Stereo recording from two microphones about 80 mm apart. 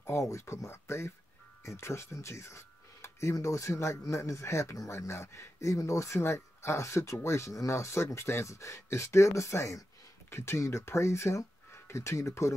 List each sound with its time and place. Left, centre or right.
0.0 s speech: left